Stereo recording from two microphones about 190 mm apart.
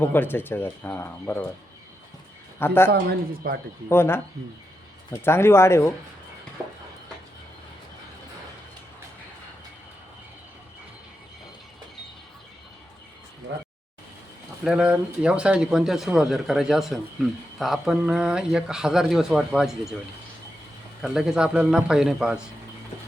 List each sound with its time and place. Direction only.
0.0 s speech: 10° left (ahead or behind)
2.6 s speech: 10° left (ahead or behind)
2.9 s speech: 55° right (ahead or behind)
3.8 s speech: 10° left (ahead or behind)
5.2 s speech: 15° left (ahead or behind)
14.6 s speech: 5° right (ahead or behind)
21.0 s speech: centre (ahead or behind)